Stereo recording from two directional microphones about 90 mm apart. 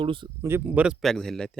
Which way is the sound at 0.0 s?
70° right (ahead or behind).